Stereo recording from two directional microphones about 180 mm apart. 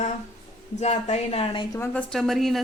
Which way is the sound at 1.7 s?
10° left (ahead or behind).